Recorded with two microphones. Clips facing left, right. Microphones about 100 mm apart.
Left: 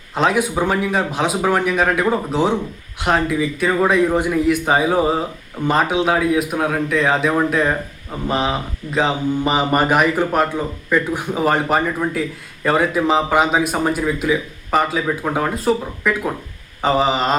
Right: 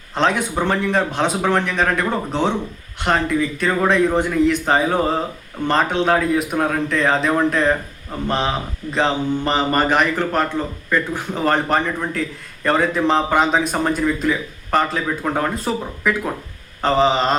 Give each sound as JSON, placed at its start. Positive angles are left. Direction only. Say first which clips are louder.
{"t": 0.1, "sound": "speech", "louder": "left 2 dB", "side_deg": 5}